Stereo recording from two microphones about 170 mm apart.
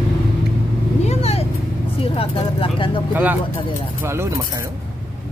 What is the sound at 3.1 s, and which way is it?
Speech, 10° right (ahead or behind).